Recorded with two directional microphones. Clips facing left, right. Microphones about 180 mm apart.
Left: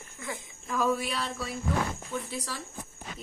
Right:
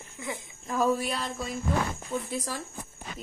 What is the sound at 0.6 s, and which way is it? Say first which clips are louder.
Speech: right 2 dB; 40° right (ahead or behind).